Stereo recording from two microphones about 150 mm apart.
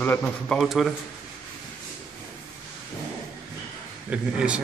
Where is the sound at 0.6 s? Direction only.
Centre (ahead or behind).